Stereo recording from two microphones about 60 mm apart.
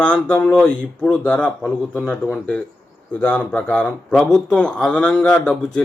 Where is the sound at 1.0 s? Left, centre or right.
Left.